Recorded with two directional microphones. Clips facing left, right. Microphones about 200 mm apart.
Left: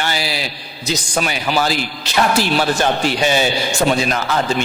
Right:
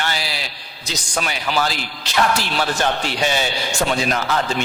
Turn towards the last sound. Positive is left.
turn(degrees=10)  # may be behind; listen again after turning